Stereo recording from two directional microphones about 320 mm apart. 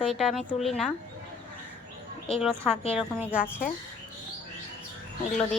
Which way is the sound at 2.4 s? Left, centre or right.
Centre.